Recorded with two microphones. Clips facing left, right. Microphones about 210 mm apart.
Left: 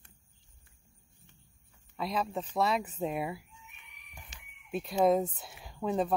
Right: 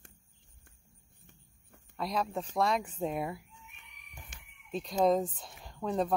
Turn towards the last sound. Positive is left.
turn(degrees=5)  # may be behind; listen again after turning